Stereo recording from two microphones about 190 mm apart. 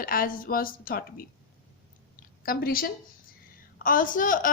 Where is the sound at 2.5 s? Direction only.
50° left (ahead or behind).